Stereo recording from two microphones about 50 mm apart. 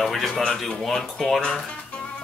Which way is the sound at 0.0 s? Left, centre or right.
Centre.